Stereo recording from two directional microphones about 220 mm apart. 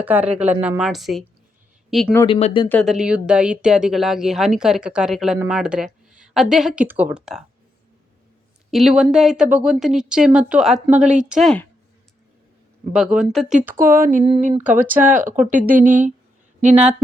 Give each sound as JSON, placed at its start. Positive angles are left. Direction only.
{"t": 0.0, "sound": "a woman's voice", "side_deg": -5}
{"t": 2.2, "sound": "speech", "side_deg": 25}
{"t": 2.6, "sound": "speech", "side_deg": 5}
{"t": 8.7, "sound": "speech", "side_deg": 0}
{"t": 12.9, "sound": "speech", "side_deg": -5}
{"t": 14.0, "sound": "speech", "side_deg": -35}
{"t": 14.6, "sound": "a woman's voice", "side_deg": -10}
{"t": 15.2, "sound": "speech", "side_deg": -35}